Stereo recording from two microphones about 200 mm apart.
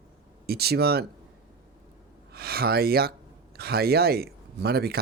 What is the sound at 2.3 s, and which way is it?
Speech, 50° right (ahead or behind).